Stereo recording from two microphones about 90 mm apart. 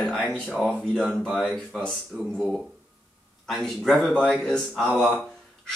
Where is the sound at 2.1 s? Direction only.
25° right (ahead or behind).